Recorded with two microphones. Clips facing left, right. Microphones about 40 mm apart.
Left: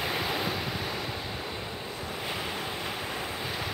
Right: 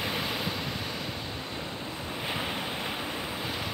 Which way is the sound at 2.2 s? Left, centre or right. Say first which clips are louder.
Right 2 dB; centre.